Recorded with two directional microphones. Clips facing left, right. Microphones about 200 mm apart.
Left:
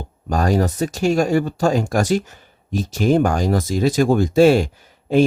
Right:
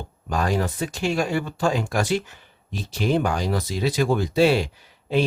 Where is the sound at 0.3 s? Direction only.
40° left (ahead or behind).